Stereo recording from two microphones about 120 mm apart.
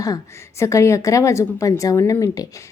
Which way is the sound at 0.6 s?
25° left (ahead or behind).